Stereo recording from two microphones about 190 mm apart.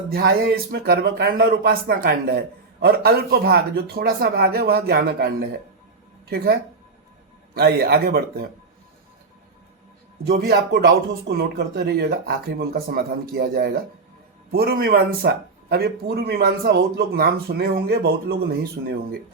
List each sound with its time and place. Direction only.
0.1 s a man's voice: 55° right (ahead or behind)
10.2 s a man's voice: 55° right (ahead or behind)